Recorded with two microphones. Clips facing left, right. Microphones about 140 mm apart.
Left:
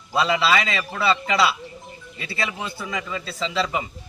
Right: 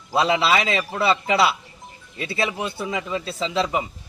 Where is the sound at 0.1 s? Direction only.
25° right (ahead or behind).